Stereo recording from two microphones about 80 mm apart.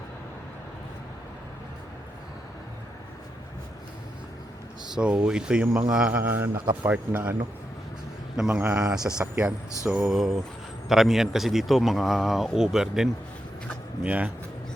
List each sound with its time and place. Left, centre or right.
4.9 s a man's voice: centre
8.4 s speech: centre
14.0 s speech: centre